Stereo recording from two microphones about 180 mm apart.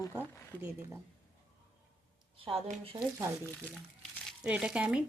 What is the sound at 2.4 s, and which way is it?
Speech, 30° right (ahead or behind).